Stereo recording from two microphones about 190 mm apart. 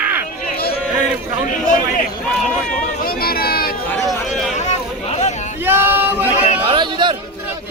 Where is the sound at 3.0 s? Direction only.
55° left (ahead or behind).